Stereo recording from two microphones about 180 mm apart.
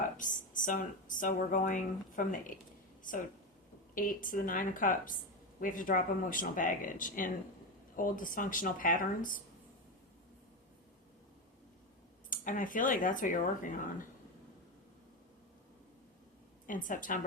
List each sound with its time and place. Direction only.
0.2 s speech: 45° left (ahead or behind)
12.3 s speech: 50° left (ahead or behind)
16.6 s speech: 50° left (ahead or behind)